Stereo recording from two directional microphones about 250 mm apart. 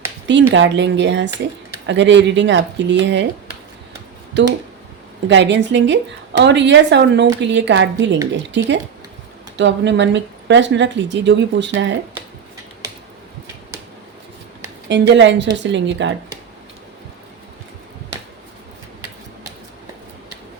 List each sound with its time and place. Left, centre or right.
0.4 s speech: right
4.4 s speech: right
14.8 s speech: right